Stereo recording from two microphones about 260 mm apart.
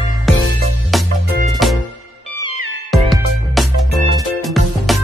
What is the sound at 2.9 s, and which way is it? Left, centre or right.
Music, centre.